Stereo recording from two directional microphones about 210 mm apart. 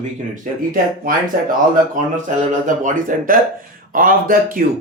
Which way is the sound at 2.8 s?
40° right (ahead or behind).